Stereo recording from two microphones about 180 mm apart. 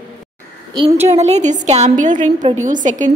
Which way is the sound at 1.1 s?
40° right (ahead or behind).